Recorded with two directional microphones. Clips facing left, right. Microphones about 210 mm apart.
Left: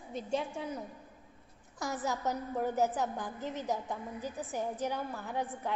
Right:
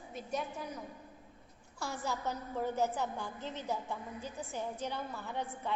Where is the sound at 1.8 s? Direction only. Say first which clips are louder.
Left 3 dB; 20° left (ahead or behind).